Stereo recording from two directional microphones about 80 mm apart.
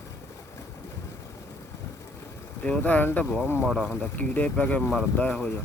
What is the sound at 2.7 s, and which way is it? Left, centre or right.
Speech, centre.